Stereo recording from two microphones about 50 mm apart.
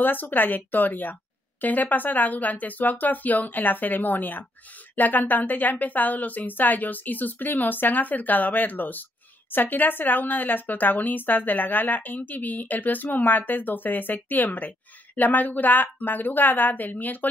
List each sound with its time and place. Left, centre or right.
0.0 s speech: left